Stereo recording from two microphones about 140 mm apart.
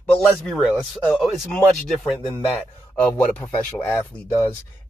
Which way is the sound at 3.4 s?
20° left (ahead or behind).